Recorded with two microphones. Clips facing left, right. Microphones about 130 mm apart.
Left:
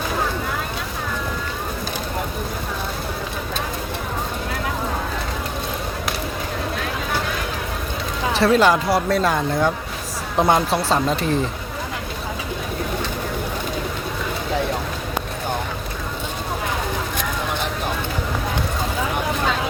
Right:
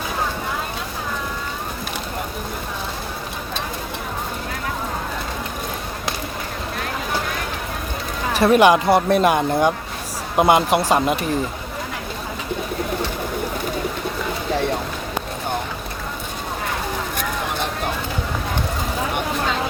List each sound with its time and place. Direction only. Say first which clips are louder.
8.3 s speech: right 2 dB; 15° right (ahead or behind)